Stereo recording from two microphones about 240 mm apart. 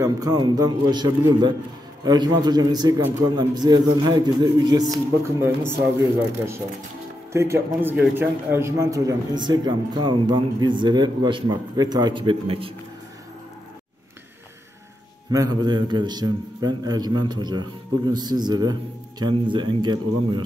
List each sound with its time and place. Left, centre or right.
0.0 s a man's voice: centre
15.3 s a man's voice: centre